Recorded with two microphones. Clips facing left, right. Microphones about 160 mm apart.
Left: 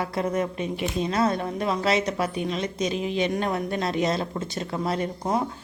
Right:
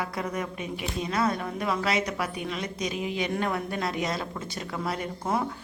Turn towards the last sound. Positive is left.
turn(degrees=20)  # may be behind; listen again after turning